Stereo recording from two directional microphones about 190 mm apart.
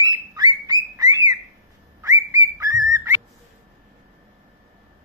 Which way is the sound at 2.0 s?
15° right (ahead or behind).